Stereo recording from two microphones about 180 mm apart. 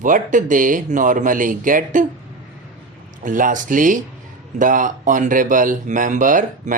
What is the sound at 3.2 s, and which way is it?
Speech, 45° right (ahead or behind).